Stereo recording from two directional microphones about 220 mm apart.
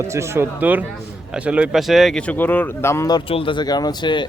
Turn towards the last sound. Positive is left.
turn(degrees=20)  # may be behind; listen again after turning